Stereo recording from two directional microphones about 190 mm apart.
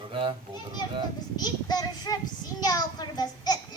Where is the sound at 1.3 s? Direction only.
20° left (ahead or behind).